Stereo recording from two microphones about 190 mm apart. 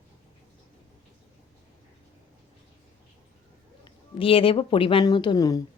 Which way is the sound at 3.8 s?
30° left (ahead or behind).